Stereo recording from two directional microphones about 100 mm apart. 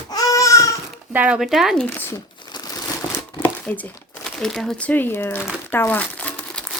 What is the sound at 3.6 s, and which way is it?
Speech, 15° left (ahead or behind).